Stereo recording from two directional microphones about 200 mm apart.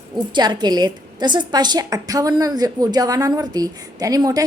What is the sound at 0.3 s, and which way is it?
A woman's voice, 20° right (ahead or behind).